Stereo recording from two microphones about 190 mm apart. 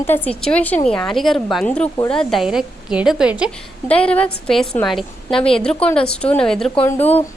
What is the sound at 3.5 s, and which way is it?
A woman's voice, 5° left (ahead or behind).